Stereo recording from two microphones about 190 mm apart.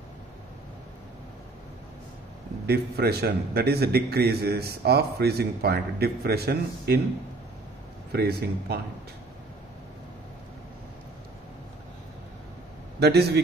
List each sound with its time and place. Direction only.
2.6 s a man's voice: 55° right (ahead or behind)
8.1 s a man's voice: 55° right (ahead or behind)
13.0 s a man's voice: 60° right (ahead or behind)